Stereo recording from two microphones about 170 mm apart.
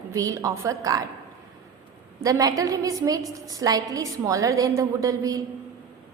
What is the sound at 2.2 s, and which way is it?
A woman's voice, 20° right (ahead or behind).